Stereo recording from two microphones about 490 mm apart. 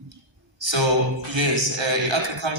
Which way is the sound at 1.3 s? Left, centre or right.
Right.